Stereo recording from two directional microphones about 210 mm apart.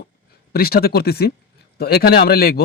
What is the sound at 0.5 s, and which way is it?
Speech, 45° left (ahead or behind).